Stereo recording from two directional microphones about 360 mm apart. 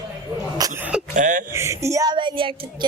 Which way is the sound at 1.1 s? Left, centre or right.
Right.